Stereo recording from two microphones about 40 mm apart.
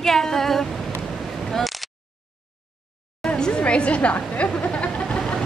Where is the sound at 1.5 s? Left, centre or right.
Centre.